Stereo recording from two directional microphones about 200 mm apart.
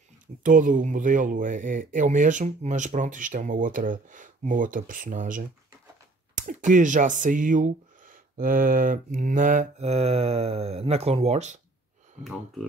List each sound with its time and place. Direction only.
0.4 s speech: 40° right (ahead or behind)
12.2 s speech: centre (ahead or behind)